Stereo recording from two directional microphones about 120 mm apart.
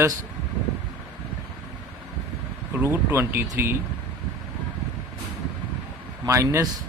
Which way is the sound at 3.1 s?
20° right (ahead or behind).